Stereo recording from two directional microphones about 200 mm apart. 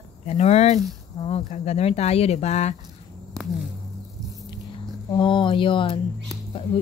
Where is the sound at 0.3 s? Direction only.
35° left (ahead or behind).